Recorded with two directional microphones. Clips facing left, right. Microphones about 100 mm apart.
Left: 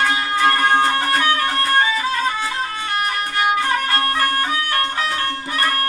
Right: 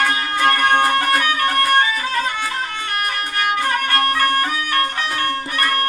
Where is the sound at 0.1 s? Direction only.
25° left (ahead or behind).